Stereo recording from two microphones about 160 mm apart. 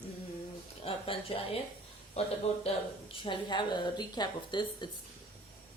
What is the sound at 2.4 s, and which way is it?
Speech, 40° left (ahead or behind).